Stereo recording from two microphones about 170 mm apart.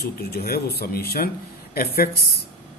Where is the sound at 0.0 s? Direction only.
65° left (ahead or behind).